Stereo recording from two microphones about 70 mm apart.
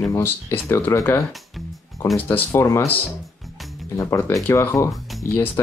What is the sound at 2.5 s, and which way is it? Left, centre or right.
Speech, left.